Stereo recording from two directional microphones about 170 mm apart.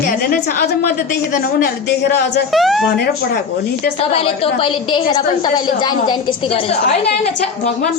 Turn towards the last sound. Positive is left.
turn(degrees=25)  # may be behind; listen again after turning